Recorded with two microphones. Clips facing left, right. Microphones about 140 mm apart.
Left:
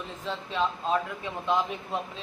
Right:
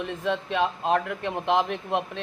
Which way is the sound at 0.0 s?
80° right.